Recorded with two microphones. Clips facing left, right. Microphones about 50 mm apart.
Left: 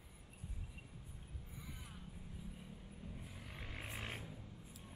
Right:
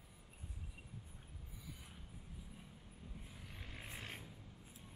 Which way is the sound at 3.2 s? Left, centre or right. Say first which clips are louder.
Left 3 dB; centre.